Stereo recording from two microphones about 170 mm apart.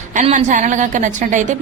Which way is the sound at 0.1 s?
45° right (ahead or behind).